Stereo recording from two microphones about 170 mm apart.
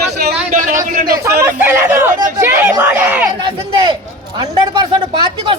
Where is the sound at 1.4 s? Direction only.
15° right (ahead or behind).